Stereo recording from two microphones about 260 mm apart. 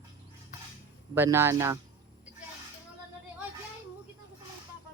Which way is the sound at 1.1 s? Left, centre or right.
Centre.